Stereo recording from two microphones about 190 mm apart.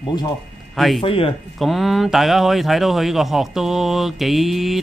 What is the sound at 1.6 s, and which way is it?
Speech, centre (ahead or behind).